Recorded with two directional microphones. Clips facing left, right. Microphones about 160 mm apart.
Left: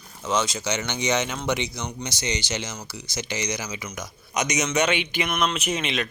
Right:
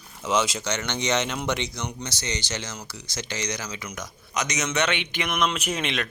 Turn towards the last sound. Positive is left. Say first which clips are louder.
# left 1 dB
turn(degrees=0)  # may be behind; listen again after turning